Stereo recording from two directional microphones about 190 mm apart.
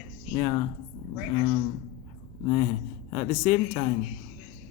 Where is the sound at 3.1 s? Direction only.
35° left (ahead or behind).